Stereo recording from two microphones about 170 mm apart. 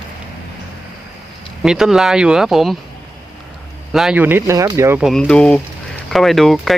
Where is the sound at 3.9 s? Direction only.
5° right (ahead or behind).